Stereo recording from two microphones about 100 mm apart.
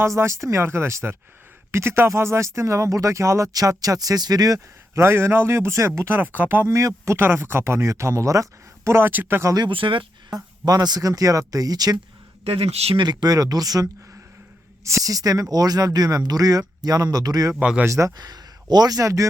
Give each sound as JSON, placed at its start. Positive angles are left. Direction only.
{"t": 0.0, "sound": "speech", "side_deg": -30}
{"t": 9.6, "sound": "speech", "side_deg": -55}
{"t": 10.3, "sound": "speech", "side_deg": -40}
{"t": 12.5, "sound": "speech", "side_deg": -85}
{"t": 13.0, "sound": "speech", "side_deg": -45}
{"t": 17.5, "sound": "speech", "side_deg": -10}
{"t": 17.8, "sound": "speech", "side_deg": -30}